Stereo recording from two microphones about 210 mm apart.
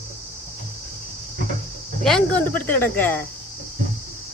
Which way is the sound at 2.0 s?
5° left (ahead or behind).